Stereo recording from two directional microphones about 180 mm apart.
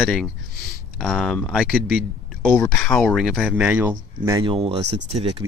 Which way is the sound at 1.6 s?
5° right (ahead or behind).